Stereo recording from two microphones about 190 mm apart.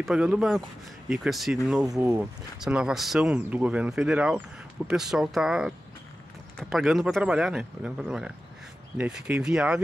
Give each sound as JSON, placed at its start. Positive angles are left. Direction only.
{"t": 0.0, "sound": "speech", "side_deg": -5}
{"t": 1.9, "sound": "speech", "side_deg": -15}
{"t": 2.6, "sound": "speech", "side_deg": -5}
{"t": 6.7, "sound": "speech", "side_deg": 0}